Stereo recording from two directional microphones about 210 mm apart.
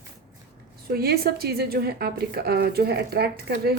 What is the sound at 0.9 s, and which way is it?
Speech, 45° right (ahead or behind).